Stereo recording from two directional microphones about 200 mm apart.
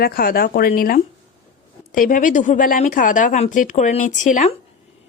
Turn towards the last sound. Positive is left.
turn(degrees=35)  # may be behind; listen again after turning